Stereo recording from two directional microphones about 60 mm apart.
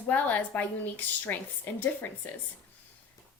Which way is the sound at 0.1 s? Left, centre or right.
Left.